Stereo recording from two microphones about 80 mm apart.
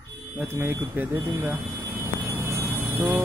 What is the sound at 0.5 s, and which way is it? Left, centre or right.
Speech, right.